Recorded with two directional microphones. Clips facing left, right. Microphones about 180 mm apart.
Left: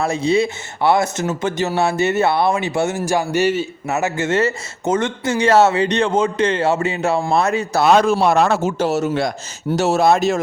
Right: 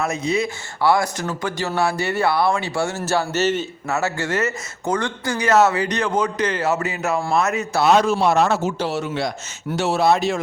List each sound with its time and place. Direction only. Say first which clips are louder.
0.0 s speech: left 5 dB; 30° left (ahead or behind)
7.8 s a man's voice: left 2 dB; 55° left (ahead or behind)